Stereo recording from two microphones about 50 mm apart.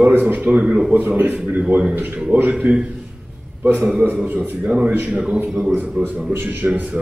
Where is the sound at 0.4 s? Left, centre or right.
Right.